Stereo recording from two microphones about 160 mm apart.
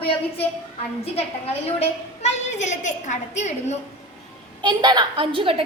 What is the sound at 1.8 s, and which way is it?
A woman's voice, 45° left (ahead or behind).